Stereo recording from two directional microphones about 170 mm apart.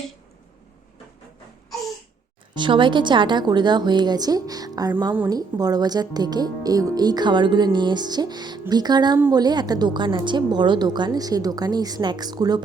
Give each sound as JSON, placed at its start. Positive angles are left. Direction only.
{"t": 2.6, "sound": "speech", "side_deg": -30}